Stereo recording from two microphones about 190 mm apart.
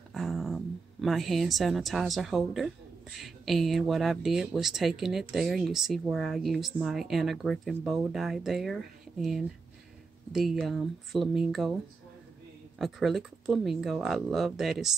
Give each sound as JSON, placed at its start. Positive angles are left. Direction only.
{"t": 0.1, "sound": "dog", "side_deg": 0}
{"t": 1.0, "sound": "speech", "side_deg": 0}
{"t": 10.3, "sound": "speech", "side_deg": 0}
{"t": 12.7, "sound": "speech", "side_deg": 0}